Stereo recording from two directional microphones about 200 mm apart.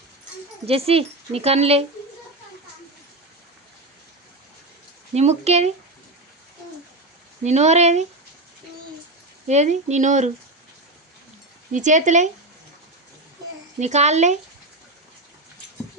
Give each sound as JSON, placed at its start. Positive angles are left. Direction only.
{"t": 0.6, "sound": "speech", "side_deg": -30}
{"t": 5.1, "sound": "speech", "side_deg": -35}
{"t": 7.4, "sound": "speech", "side_deg": -35}
{"t": 9.5, "sound": "speech", "side_deg": -35}
{"t": 11.7, "sound": "speech", "side_deg": -35}
{"t": 13.7, "sound": "speech", "side_deg": -35}